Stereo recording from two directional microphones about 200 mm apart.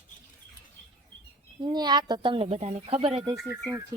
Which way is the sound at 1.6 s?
20° right (ahead or behind).